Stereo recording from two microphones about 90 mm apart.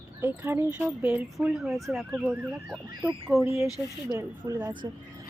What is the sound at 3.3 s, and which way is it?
Speech, 20° right (ahead or behind).